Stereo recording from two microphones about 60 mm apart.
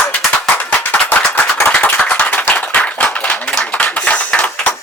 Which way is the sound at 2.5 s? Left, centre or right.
Left.